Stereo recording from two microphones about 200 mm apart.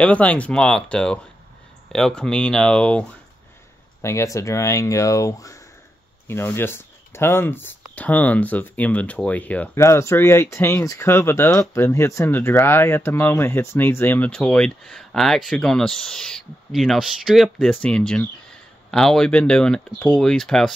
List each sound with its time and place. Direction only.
0.0 s speech: 5° left (ahead or behind)